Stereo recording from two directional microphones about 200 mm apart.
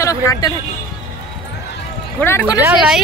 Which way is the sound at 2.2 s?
10° left (ahead or behind).